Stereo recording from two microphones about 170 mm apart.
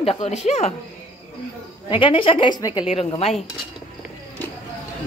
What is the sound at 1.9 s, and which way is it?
A woman's voice, 30° left (ahead or behind).